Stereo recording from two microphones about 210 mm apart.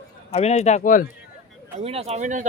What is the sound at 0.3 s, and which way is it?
Speech, 30° left (ahead or behind).